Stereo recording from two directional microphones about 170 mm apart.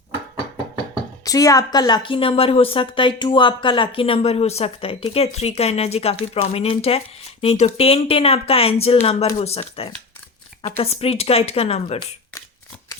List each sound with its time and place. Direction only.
1.2 s a woman's voice: 20° left (ahead or behind); by 11.9 s 35° left (ahead or behind)